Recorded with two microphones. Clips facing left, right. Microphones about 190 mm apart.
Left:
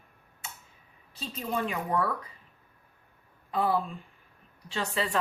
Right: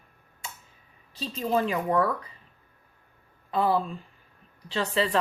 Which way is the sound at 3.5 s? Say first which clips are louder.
Right 3 dB; 30° right (ahead or behind).